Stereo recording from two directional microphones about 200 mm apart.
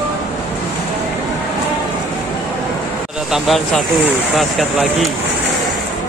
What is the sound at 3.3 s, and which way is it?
Speech, centre (ahead or behind).